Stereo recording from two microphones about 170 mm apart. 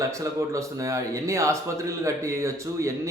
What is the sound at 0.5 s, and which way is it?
A man's voice, 20° right (ahead or behind).